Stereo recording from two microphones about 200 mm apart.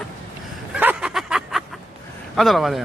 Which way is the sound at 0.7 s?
5° right (ahead or behind).